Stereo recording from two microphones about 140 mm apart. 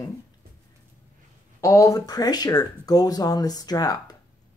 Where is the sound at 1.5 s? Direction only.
20° left (ahead or behind).